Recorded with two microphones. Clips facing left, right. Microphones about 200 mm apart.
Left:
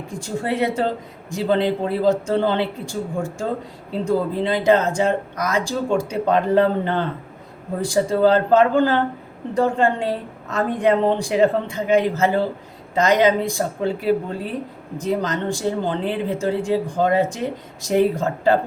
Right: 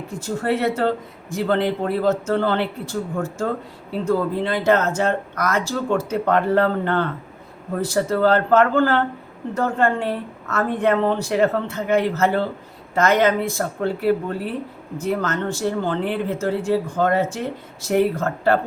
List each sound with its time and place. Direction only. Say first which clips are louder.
0.1 s speech: right 2 dB; 15° left (ahead or behind)